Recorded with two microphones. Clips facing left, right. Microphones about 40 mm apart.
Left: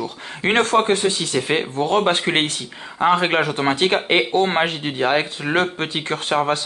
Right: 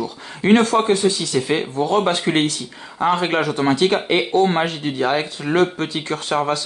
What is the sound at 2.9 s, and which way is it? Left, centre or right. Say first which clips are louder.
Speech: left 1 dB; left.